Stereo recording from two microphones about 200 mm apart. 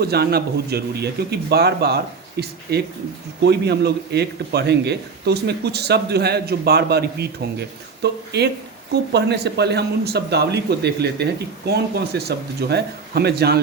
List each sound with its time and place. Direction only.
0.0 s speech: 55° right (ahead or behind)